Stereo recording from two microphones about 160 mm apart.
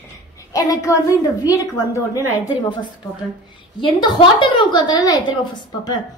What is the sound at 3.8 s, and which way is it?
A woman's voice, 30° left (ahead or behind).